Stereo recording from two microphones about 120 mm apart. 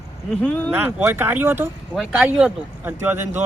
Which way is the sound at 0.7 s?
15° right (ahead or behind).